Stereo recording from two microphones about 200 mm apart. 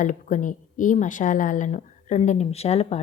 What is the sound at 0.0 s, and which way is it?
A woman's voice, 40° left (ahead or behind).